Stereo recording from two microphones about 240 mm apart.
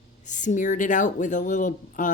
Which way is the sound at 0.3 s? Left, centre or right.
Left.